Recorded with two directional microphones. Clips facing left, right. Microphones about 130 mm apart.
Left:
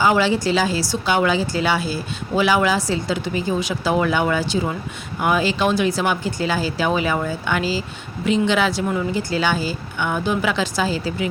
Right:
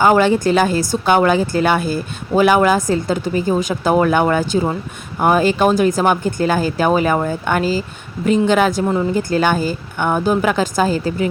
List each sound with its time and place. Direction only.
0.0 s speech: 50° right (ahead or behind)